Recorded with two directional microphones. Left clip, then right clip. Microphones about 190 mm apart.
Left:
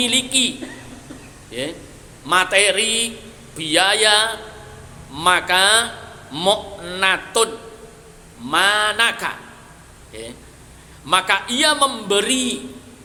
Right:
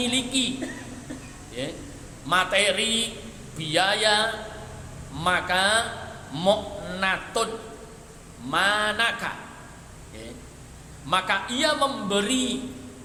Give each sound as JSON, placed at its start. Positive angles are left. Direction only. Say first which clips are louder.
{"t": 0.0, "sound": "a man's voice", "louder": "left 7 dB", "side_deg": 30}
{"t": 1.5, "sound": "a man's voice", "louder": "left 6 dB", "side_deg": 30}
{"t": 2.2, "sound": "a sound", "louder": "left 6 dB", "side_deg": 30}
{"t": 5.1, "sound": "a man's voice", "louder": "left 7 dB", "side_deg": 30}
{"t": 8.4, "sound": "a sound", "louder": "left 6 dB", "side_deg": 30}
{"t": 11.0, "sound": "a man's voice", "louder": "left 7 dB", "side_deg": 30}